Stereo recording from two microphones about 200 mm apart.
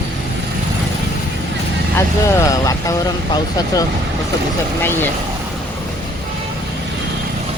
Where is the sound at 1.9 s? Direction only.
15° left (ahead or behind).